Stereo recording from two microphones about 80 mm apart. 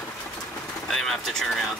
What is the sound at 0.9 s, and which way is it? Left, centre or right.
Speech, centre.